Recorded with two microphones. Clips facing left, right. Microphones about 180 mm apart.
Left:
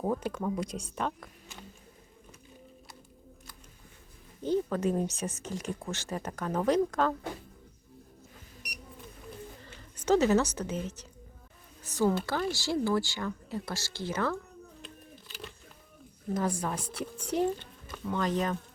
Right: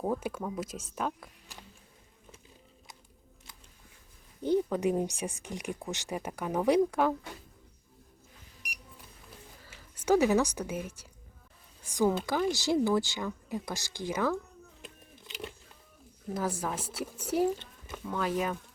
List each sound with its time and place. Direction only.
0.0 s speech: 5° right (ahead or behind)
4.4 s speech: 15° right (ahead or behind)
9.6 s a woman's voice: 5° right (ahead or behind)
16.3 s speech: 5° right (ahead or behind)